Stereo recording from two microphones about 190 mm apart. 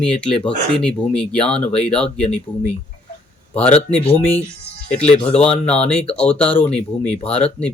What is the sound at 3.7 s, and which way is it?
Speech, 30° left (ahead or behind).